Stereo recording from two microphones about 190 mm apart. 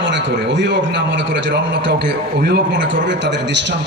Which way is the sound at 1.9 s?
55° right (ahead or behind).